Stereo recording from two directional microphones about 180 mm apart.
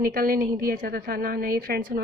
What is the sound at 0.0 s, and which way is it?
A woman's voice, 55° right (ahead or behind).